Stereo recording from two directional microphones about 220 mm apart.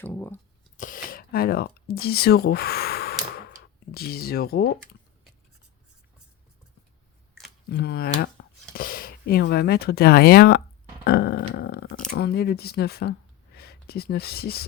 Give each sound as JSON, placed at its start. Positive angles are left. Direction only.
{"t": 0.0, "sound": "speech", "side_deg": 10}
{"t": 0.8, "sound": "speech", "side_deg": 40}
{"t": 3.9, "sound": "dog", "side_deg": 45}
{"t": 7.7, "sound": "dog", "side_deg": 45}
{"t": 8.7, "sound": "speech", "side_deg": 40}
{"t": 11.0, "sound": "dog", "side_deg": 45}
{"t": 12.1, "sound": "speech", "side_deg": 45}